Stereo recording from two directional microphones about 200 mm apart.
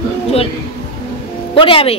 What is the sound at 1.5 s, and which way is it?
Speech, 25° left (ahead or behind).